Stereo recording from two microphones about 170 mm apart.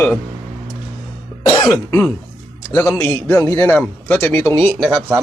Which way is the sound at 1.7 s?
15° left (ahead or behind).